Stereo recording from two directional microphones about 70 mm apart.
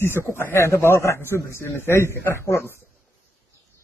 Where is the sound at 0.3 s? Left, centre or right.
Left.